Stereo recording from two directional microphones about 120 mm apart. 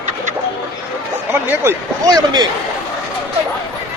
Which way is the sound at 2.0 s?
35° right (ahead or behind).